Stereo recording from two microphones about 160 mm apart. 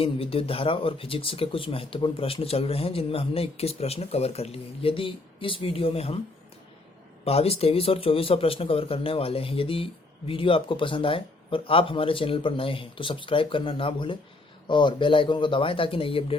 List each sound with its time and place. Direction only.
0.0 s speech: 35° left (ahead or behind)
7.3 s speech: 40° left (ahead or behind)